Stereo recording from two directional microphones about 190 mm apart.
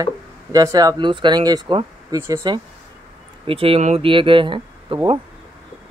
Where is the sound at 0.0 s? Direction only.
20° right (ahead or behind).